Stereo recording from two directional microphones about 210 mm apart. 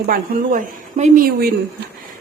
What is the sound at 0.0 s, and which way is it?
Speech, 40° right (ahead or behind).